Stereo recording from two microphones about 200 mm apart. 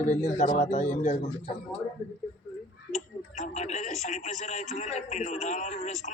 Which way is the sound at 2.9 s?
35° left (ahead or behind).